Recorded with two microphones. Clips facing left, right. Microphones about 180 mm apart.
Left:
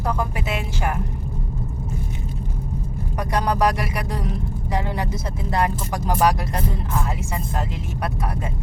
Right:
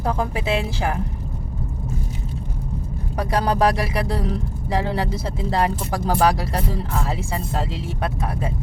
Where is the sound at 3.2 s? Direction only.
30° right (ahead or behind).